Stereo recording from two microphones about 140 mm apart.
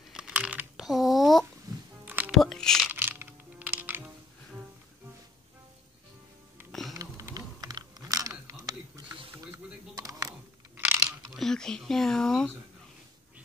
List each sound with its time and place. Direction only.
0.1 s computer keyboard: 5° right (ahead or behind)
1.7 s music: 25° right (ahead or behind)
2.0 s music: 15° right (ahead or behind)
2.3 s music: 5° left (ahead or behind)
2.9 s music: 15° right (ahead or behind)
6.9 s typing: 25° right (ahead or behind)
9.9 s a sound: 25° right (ahead or behind)
11.3 s a sound: 5° left (ahead or behind)